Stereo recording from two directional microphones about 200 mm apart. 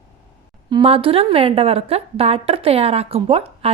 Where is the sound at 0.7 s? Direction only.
25° right (ahead or behind).